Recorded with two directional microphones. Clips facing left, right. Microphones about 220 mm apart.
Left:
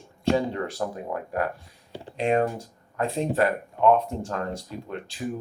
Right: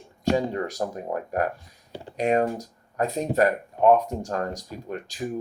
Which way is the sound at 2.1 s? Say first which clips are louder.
Right 1 dB; 40° right (ahead or behind).